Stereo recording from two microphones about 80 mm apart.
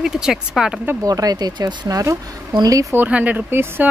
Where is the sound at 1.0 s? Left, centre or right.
Right.